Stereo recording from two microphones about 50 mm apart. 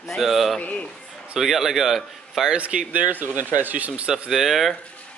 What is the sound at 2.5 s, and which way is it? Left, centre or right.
Speech, right.